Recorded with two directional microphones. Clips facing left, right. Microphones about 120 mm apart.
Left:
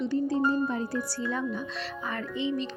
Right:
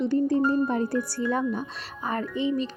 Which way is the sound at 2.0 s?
40° right (ahead or behind).